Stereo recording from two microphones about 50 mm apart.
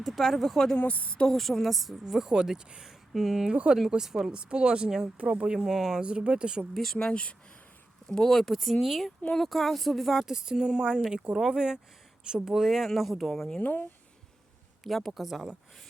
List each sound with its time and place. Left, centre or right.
0.0 s speech: centre
0.8 s a woman's voice: left
1.3 s a woman's voice: centre
3.5 s speech: centre
3.8 s a woman's voice: centre
4.3 s speech: centre
5.1 s speech: right
5.5 s a woman's voice: centre
6.0 s speech: right
6.7 s speech: centre
7.1 s a woman's voice: left
8.0 s a woman's voice: centre
13.6 s speech: left
14.8 s speech: centre